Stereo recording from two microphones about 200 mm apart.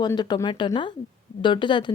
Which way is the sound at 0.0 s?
20° left (ahead or behind).